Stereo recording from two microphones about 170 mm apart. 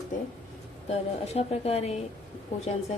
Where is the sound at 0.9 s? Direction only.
40° left (ahead or behind).